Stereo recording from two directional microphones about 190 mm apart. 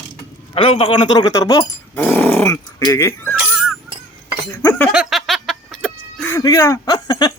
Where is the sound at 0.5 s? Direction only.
30° left (ahead or behind).